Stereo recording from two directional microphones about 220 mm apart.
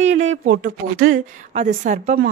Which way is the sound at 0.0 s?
30° right (ahead or behind).